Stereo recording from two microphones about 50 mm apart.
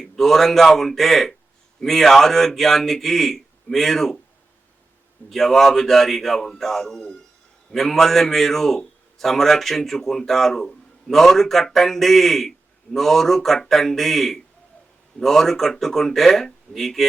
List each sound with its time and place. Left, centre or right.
0.0 s speech: centre
5.3 s a man's voice: centre